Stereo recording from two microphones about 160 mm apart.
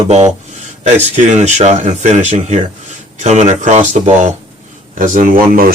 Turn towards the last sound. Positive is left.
turn(degrees=-65)  # may be behind; listen again after turning